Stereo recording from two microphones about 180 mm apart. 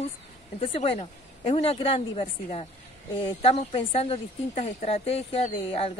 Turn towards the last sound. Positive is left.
turn(degrees=30)  # may be behind; listen again after turning